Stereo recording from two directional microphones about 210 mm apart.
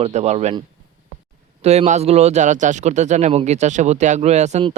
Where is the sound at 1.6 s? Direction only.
35° right (ahead or behind).